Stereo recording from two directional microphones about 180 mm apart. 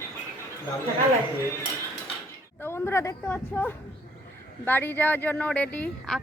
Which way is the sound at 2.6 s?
15° left (ahead or behind).